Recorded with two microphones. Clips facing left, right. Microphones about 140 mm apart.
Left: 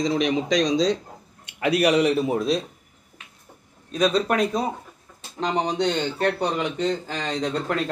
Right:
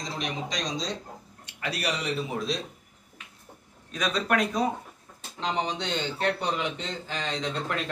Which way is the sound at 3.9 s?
30° left (ahead or behind).